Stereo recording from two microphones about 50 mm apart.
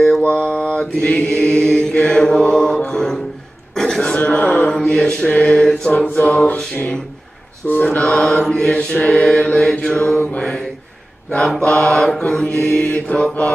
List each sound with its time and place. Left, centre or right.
0.2 s mantra: left
3.7 s throat clearing: centre
4.2 s mantra: left
5.9 s mantra: left
7.6 s mantra: left
8.0 s mantra: centre
11.6 s mantra: centre
12.8 s mantra: left